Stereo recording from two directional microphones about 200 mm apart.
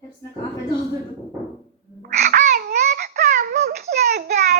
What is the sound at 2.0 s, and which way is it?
Babbling, 45° right (ahead or behind).